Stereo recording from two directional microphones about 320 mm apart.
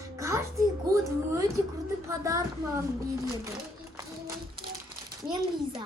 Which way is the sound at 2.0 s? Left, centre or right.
Centre.